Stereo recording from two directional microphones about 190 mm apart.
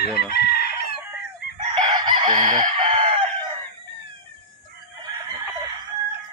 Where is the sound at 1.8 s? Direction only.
25° right (ahead or behind).